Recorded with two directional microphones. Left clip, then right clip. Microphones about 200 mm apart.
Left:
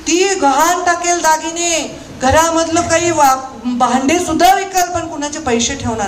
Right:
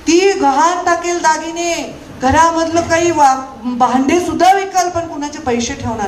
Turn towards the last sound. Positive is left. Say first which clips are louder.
# left 2 dB
turn(degrees=40)  # may be behind; listen again after turning